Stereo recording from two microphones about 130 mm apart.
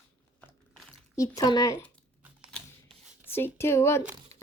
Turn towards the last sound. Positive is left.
turn(degrees=20)  # may be behind; listen again after turning